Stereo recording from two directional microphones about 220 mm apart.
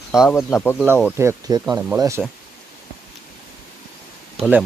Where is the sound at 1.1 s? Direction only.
15° right (ahead or behind).